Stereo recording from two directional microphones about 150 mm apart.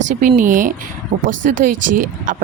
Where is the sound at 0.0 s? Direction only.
55° right (ahead or behind).